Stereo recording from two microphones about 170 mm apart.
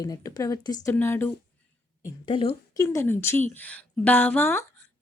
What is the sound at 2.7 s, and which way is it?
Speech, 20° left (ahead or behind).